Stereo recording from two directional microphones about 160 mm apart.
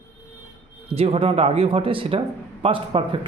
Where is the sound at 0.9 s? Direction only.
35° right (ahead or behind).